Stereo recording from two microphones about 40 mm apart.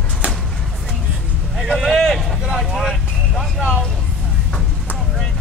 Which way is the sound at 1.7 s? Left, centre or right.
Centre.